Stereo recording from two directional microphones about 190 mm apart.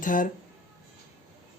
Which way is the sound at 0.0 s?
45° left (ahead or behind).